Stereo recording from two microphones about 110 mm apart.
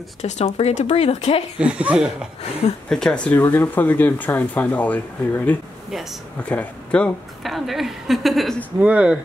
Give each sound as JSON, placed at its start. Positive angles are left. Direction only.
{"t": 0.2, "sound": "speech", "side_deg": 85}
{"t": 1.6, "sound": "speech", "side_deg": -10}
{"t": 2.9, "sound": "a woman's voice", "side_deg": 5}
{"t": 3.5, "sound": "speech", "side_deg": 15}
{"t": 7.4, "sound": "a woman's voice", "side_deg": 0}
{"t": 8.7, "sound": "speech", "side_deg": -10}